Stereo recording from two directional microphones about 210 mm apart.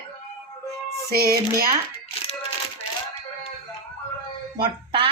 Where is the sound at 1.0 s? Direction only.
45° right (ahead or behind).